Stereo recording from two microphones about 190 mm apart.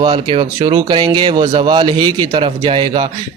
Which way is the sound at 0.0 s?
25° right (ahead or behind).